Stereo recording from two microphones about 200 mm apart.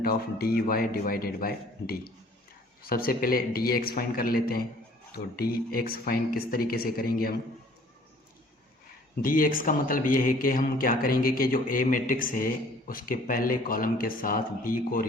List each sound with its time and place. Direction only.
0.0 s speech: 50° left (ahead or behind)
9.2 s speech: 45° left (ahead or behind)